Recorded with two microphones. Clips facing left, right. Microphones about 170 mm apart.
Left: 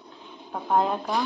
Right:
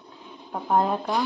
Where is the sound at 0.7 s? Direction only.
Centre (ahead or behind).